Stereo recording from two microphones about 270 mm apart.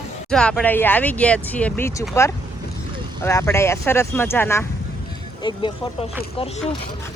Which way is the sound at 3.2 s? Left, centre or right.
Centre.